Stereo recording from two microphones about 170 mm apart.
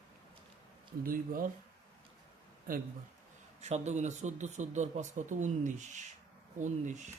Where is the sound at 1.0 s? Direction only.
55° right (ahead or behind).